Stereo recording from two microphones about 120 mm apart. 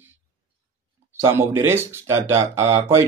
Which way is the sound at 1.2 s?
25° right (ahead or behind).